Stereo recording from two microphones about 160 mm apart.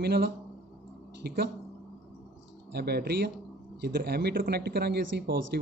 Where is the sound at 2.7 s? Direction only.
80° right.